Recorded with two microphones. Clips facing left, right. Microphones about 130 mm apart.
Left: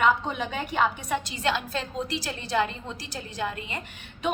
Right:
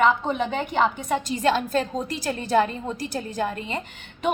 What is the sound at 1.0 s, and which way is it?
A woman's voice, 45° right (ahead or behind).